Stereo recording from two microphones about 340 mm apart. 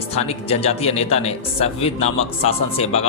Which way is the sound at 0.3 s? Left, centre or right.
Centre.